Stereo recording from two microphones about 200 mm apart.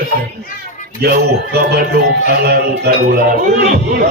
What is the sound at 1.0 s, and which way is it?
Music, 55° right (ahead or behind).